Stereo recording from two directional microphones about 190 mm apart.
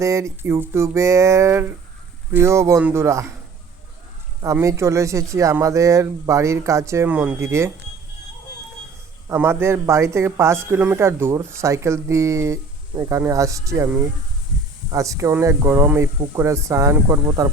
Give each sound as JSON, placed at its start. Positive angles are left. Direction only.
{"t": 0.0, "sound": "speech", "side_deg": -15}
{"t": 4.4, "sound": "speech", "side_deg": -15}
{"t": 9.3, "sound": "speech", "side_deg": -15}